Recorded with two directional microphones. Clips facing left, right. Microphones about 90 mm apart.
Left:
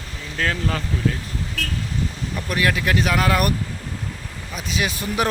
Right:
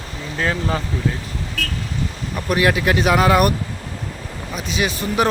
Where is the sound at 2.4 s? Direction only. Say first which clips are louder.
Right 5 dB; 15° right (ahead or behind).